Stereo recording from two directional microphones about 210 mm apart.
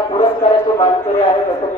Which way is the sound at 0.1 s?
25° left (ahead or behind).